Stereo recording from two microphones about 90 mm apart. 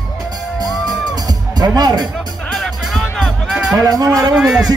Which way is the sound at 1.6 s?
50° right (ahead or behind).